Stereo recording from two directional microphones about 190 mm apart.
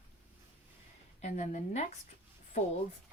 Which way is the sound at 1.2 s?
35° left (ahead or behind).